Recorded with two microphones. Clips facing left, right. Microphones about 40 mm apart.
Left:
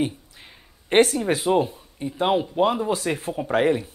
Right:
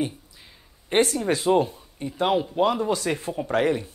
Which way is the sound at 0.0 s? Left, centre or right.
Left.